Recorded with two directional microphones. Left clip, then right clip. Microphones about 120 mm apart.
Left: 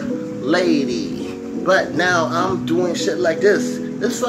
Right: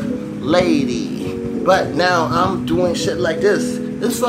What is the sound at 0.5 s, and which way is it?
Speech, 10° right (ahead or behind).